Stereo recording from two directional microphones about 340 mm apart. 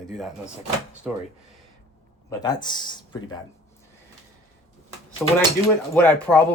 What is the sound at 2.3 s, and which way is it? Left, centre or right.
Speech, centre.